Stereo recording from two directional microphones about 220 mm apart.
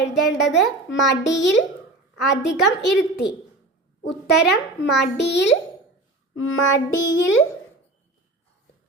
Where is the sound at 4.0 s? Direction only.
50° left (ahead or behind).